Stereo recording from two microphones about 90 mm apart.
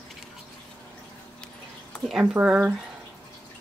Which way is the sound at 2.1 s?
15° right (ahead or behind).